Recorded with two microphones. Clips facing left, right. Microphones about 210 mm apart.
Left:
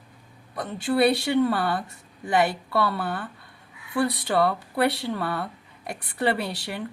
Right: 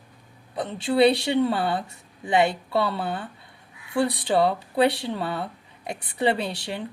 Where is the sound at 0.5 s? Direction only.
25° right (ahead or behind).